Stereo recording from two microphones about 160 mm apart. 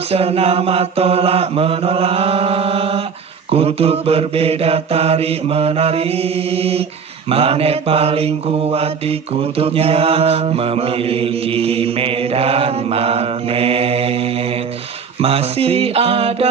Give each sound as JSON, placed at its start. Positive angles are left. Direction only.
{"t": 0.1, "sound": "mantra", "side_deg": -40}